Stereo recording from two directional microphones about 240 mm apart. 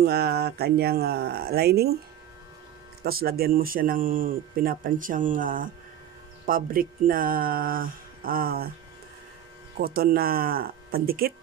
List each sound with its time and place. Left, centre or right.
0.0 s speech: right
3.0 s speech: right
9.8 s speech: right